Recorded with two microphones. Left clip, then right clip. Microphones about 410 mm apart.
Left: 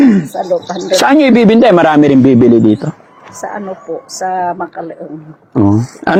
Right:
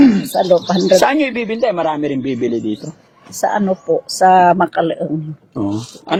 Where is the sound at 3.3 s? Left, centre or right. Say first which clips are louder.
Right 5 dB; right.